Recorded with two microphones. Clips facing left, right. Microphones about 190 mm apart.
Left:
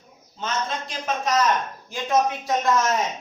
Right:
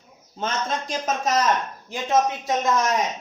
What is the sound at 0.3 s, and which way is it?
A man's voice, 45° right (ahead or behind).